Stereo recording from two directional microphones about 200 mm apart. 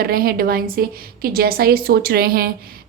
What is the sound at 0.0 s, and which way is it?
A woman's voice, 50° right (ahead or behind).